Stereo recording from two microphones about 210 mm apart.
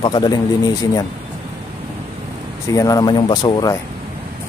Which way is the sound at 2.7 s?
15° left (ahead or behind).